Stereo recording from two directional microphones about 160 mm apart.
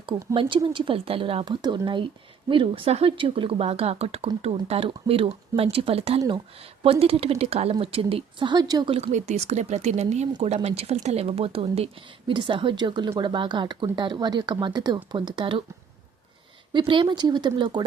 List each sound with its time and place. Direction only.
0.0 s speech: 30° right (ahead or behind)
8.9 s speech: 45° right (ahead or behind)
16.7 s speech: 30° right (ahead or behind)